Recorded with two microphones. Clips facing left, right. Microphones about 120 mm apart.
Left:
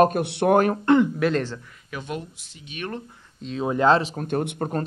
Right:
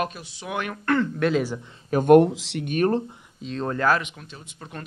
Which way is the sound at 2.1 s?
80° right.